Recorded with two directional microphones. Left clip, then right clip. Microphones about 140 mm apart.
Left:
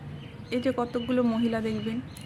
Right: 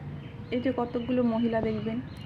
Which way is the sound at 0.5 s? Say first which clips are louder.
Left 1 dB; 25° left (ahead or behind).